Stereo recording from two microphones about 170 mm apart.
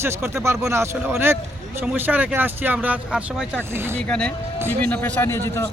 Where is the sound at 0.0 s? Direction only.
15° right (ahead or behind).